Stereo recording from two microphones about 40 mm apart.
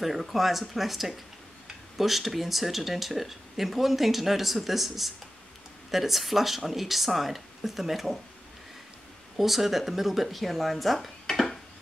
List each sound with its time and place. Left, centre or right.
0.0 s speech: centre
9.4 s speech: centre
11.2 s a sound: centre